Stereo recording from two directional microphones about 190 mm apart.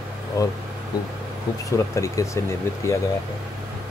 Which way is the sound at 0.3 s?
20° left (ahead or behind).